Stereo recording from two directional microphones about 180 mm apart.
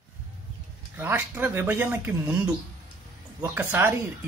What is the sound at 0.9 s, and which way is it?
Speech, 10° right (ahead or behind).